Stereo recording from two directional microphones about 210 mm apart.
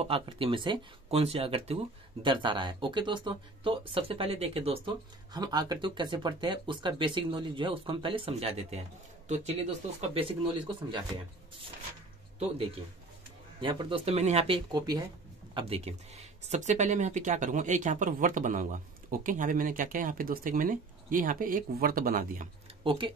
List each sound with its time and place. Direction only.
0.0 s speech: 25° right (ahead or behind)
13.6 s speech: 25° right (ahead or behind); by 22.5 s 40° right (ahead or behind)
22.8 s speech: 25° right (ahead or behind)